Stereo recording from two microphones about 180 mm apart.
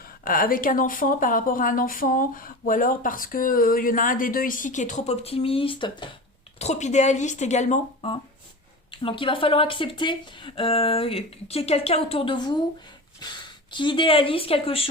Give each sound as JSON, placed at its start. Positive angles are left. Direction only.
{"t": 0.3, "sound": "a woman's voice", "side_deg": 50}
{"t": 6.6, "sound": "speech", "side_deg": 40}
{"t": 8.9, "sound": "speech", "side_deg": 30}